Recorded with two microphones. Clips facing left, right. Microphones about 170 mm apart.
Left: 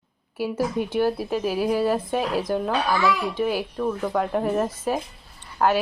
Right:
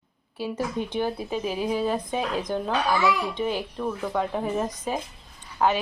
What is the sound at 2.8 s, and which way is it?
Speech, 15° right (ahead or behind).